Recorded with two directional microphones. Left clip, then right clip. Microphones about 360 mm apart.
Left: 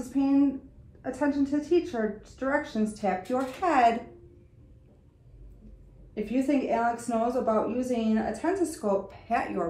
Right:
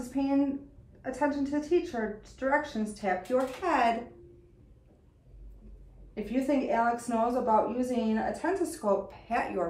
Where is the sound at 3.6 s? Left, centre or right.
Centre.